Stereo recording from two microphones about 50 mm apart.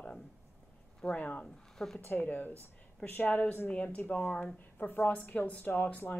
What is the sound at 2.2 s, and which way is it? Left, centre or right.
A woman's voice, left.